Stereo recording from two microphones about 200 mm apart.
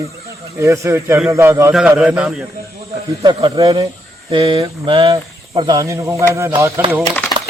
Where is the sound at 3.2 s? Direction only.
20° right (ahead or behind).